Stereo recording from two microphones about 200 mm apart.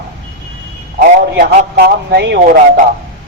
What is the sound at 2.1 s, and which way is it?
Speech, 50° right (ahead or behind).